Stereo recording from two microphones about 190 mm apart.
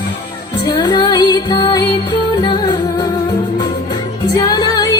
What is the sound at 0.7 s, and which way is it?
Music, 20° left (ahead or behind).